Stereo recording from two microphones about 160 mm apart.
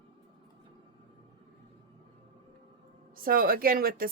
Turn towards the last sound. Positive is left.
turn(degrees=-65)  # may be behind; listen again after turning